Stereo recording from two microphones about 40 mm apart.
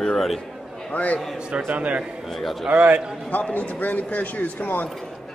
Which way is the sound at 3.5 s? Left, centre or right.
Left.